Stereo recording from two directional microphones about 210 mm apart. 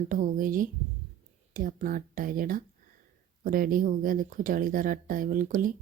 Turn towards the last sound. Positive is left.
turn(degrees=-40)  # may be behind; listen again after turning